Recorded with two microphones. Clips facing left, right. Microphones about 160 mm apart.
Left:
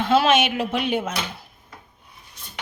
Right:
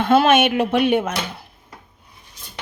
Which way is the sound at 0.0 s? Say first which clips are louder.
Right 3 dB; 55° right (ahead or behind).